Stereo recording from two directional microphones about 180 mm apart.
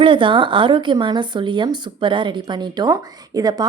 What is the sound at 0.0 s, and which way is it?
A woman's voice, 30° right (ahead or behind).